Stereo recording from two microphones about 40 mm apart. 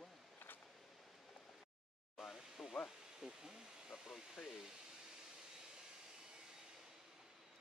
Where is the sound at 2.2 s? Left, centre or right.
Centre.